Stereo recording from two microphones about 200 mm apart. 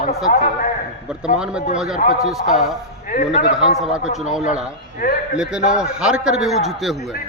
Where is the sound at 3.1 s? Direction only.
40° left (ahead or behind).